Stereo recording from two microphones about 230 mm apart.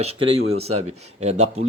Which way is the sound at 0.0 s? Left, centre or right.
Right.